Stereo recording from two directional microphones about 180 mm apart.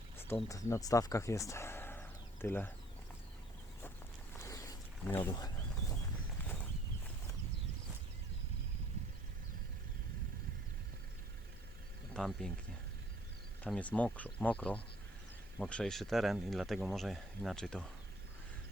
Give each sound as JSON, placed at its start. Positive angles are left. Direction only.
{"t": 0.3, "sound": "speech", "side_deg": 10}
{"t": 4.4, "sound": "boat", "side_deg": 15}
{"t": 12.1, "sound": "speech", "side_deg": 5}
{"t": 13.7, "sound": "speech", "side_deg": 10}